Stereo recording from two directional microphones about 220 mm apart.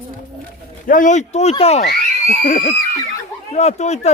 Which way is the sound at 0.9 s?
35° left (ahead or behind).